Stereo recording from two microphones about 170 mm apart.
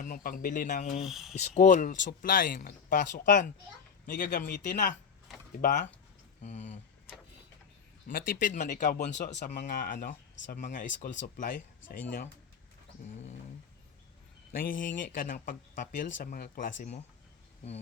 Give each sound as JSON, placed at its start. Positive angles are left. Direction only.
{"t": 0.0, "sound": "speech", "side_deg": 55}
{"t": 0.9, "sound": "speech", "side_deg": 0}
{"t": 1.4, "sound": "speech", "side_deg": 45}
{"t": 6.4, "sound": "speech", "side_deg": 45}
{"t": 8.0, "sound": "speech", "side_deg": 55}
{"t": 10.8, "sound": "speech", "side_deg": 90}
{"t": 11.2, "sound": "speech", "side_deg": 50}
{"t": 14.5, "sound": "speech", "side_deg": 55}